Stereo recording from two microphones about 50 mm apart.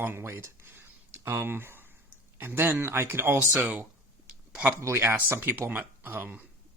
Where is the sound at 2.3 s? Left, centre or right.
Right.